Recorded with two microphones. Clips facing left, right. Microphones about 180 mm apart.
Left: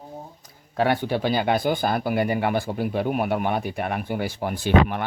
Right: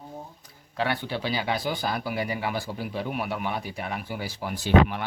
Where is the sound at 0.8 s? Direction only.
50° left (ahead or behind).